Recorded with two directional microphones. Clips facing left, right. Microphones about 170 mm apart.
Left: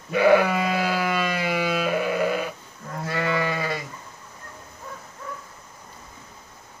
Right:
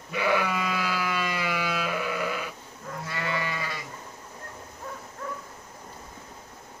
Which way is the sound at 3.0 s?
45° left (ahead or behind).